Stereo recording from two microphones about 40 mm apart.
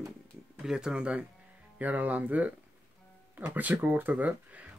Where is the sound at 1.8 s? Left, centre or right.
Right.